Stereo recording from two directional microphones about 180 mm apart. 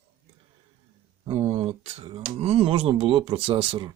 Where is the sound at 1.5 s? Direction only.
35° right (ahead or behind).